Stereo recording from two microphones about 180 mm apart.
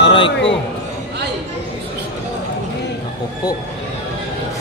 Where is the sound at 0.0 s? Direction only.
30° left (ahead or behind).